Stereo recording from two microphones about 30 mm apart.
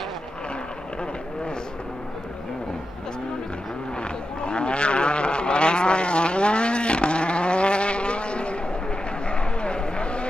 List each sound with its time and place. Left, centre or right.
4.4 s vehicle: left